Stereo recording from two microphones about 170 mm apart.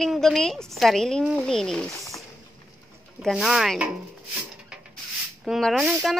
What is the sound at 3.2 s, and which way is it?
Speech, centre (ahead or behind).